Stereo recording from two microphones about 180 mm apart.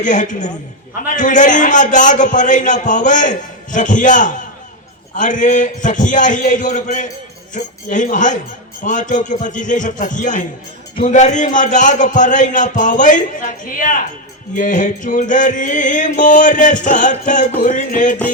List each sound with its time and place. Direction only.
0.0 s music: 45° left (ahead or behind)